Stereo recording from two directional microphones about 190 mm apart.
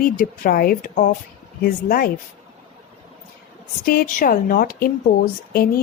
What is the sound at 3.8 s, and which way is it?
A woman's voice, 50° left (ahead or behind).